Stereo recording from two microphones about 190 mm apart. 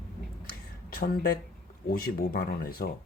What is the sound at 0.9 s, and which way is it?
Speech, 55° left (ahead or behind).